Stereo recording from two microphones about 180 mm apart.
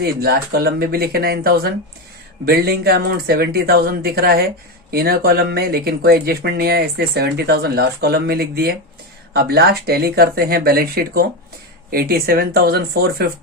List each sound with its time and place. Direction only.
0.0 s speech: 60° right (ahead or behind)